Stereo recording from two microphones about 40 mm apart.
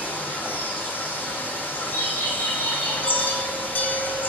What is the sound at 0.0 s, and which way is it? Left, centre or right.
Vehicle, left.